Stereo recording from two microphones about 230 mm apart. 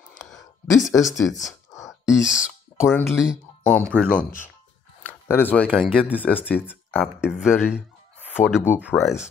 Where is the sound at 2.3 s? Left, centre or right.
Centre.